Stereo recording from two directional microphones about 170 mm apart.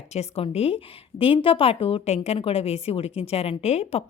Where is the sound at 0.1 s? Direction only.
35° left (ahead or behind).